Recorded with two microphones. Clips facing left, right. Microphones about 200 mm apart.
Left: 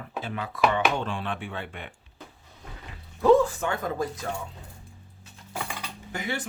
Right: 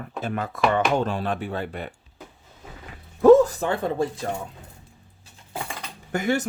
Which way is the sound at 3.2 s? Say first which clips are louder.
Right 6 dB; 45° right (ahead or behind).